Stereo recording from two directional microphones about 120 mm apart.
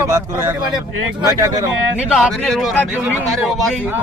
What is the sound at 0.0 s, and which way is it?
A man's voice, 25° right (ahead or behind).